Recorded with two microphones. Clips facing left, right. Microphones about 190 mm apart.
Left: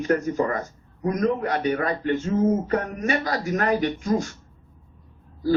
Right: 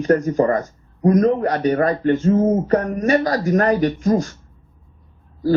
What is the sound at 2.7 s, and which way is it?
Speech, 35° right (ahead or behind).